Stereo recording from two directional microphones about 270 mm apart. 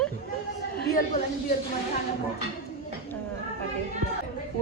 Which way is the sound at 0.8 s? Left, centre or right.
Left.